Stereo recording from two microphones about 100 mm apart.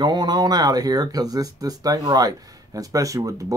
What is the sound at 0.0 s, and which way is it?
Speech, 45° right (ahead or behind).